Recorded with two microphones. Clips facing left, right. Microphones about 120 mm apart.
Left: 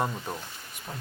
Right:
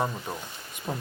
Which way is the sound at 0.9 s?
25° right (ahead or behind).